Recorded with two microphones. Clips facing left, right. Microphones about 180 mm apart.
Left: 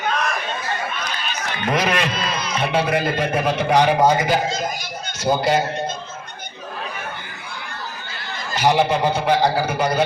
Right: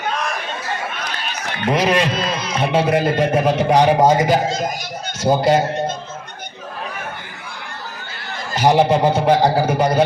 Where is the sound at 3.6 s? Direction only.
40° right (ahead or behind).